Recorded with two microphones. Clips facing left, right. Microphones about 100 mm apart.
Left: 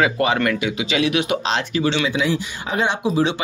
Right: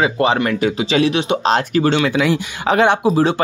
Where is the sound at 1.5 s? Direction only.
50° right (ahead or behind).